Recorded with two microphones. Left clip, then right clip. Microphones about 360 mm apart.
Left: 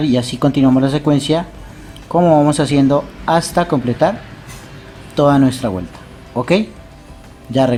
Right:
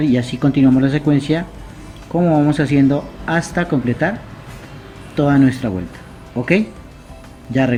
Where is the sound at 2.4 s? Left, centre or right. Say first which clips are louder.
Left 2 dB; centre.